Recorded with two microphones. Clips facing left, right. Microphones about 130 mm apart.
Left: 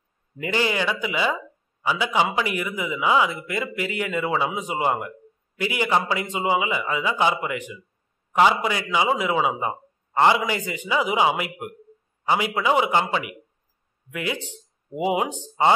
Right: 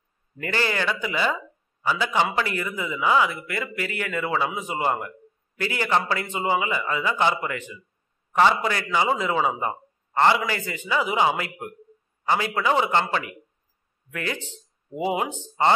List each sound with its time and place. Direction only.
0.4 s a man's voice: 15° left (ahead or behind)